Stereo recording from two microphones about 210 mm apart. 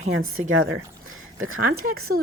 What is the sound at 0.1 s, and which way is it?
A woman's voice, 75° right (ahead or behind).